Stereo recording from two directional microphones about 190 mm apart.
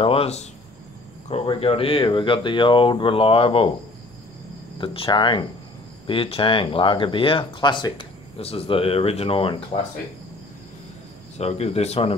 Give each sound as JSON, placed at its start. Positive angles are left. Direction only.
{"t": 0.0, "sound": "speech", "side_deg": 30}
{"t": 4.7, "sound": "speech", "side_deg": 30}
{"t": 11.3, "sound": "speech", "side_deg": 35}